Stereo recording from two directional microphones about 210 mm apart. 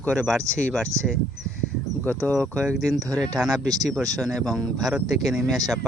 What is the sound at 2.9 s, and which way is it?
Speech, 15° right (ahead or behind).